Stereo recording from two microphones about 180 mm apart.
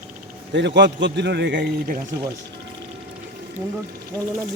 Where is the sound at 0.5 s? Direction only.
75° right (ahead or behind).